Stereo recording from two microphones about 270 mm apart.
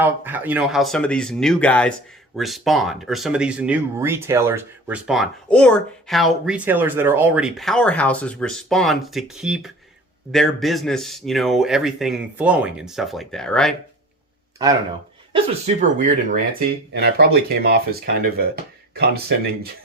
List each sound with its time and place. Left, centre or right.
0.0 s speech: centre
15.3 s speech: right